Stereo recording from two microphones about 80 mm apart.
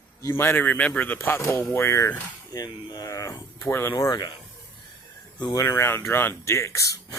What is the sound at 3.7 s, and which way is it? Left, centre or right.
Speech, left.